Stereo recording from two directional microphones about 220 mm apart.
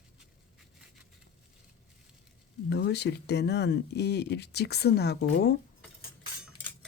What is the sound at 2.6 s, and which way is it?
Speech, 50° left (ahead or behind).